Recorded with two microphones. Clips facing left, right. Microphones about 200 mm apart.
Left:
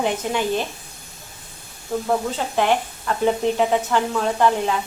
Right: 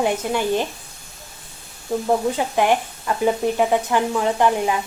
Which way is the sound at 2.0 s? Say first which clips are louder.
Right 3 dB; 15° right (ahead or behind).